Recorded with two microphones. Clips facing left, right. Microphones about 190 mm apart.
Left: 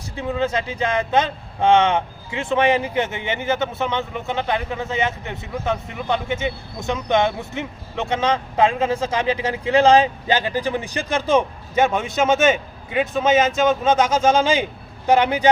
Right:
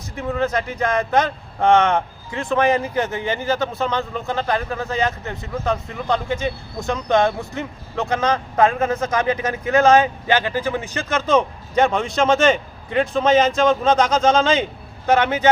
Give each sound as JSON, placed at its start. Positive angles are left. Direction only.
{"t": 0.5, "sound": "speech", "side_deg": 25}
{"t": 2.4, "sound": "speech", "side_deg": 25}
{"t": 8.6, "sound": "speech", "side_deg": 15}
{"t": 9.0, "sound": "speech", "side_deg": 30}
{"t": 10.2, "sound": "speech", "side_deg": 15}